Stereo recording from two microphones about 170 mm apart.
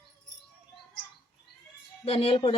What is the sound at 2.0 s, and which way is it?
Speech, 35° left (ahead or behind).